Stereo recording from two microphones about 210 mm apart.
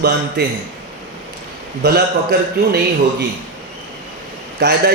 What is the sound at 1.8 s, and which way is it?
Speech, 50° right (ahead or behind).